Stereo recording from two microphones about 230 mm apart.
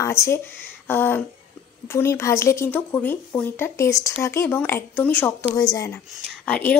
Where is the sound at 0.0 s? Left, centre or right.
Centre.